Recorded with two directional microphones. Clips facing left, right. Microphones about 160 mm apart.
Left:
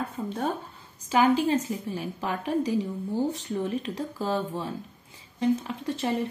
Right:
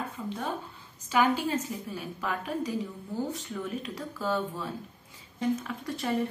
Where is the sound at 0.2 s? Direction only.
35° left (ahead or behind).